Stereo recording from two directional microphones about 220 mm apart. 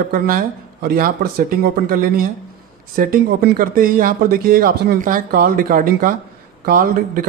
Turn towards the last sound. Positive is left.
turn(degrees=-40)  # may be behind; listen again after turning